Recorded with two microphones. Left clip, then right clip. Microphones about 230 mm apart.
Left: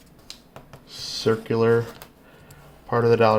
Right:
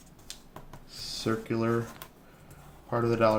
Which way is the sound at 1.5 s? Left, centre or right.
Left.